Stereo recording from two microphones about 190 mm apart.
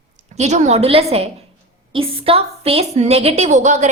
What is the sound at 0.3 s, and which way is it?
A woman's voice, 35° right (ahead or behind).